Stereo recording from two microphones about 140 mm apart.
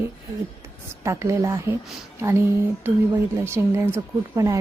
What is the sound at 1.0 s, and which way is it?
A woman's voice, 20° right (ahead or behind).